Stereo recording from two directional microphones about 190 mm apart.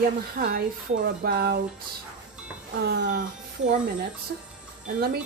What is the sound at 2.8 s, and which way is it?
Speech, 65° right (ahead or behind).